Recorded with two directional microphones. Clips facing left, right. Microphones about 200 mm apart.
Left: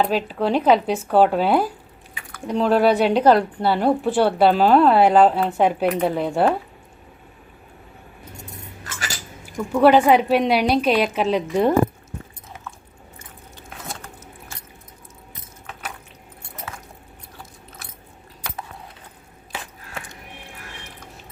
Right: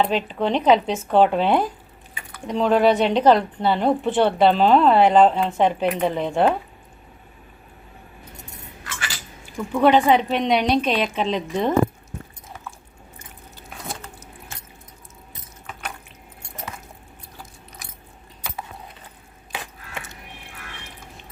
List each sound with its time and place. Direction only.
0.0 s a woman's voice: 5° left (ahead or behind)
8.8 s keys jangling: 40° left (ahead or behind)
9.6 s a woman's voice: 5° left (ahead or behind)